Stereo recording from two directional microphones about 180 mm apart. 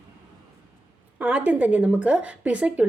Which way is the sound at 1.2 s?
5° right (ahead or behind).